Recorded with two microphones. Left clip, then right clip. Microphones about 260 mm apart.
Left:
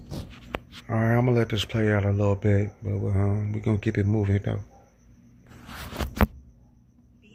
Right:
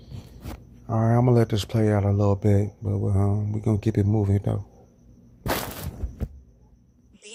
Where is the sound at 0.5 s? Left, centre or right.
Left.